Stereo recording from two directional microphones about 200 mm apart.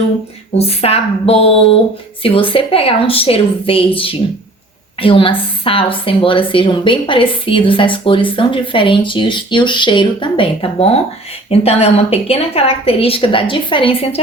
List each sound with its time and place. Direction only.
0.5 s a woman's voice: 30° left (ahead or behind)